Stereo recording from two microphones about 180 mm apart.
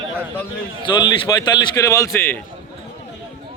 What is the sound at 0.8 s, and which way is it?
A man's voice, 25° left (ahead or behind).